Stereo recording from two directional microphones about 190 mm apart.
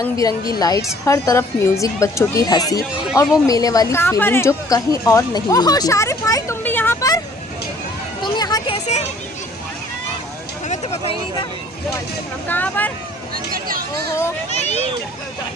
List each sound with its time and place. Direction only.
0.2 s a woman's voice: 20° left (ahead or behind)
8.2 s a sound: 20° left (ahead or behind)
10.7 s speech: 30° left (ahead or behind)
12.5 s a woman's voice: 10° left (ahead or behind)
13.3 s speech: 50° right (ahead or behind)
14.5 s speech: 35° left (ahead or behind)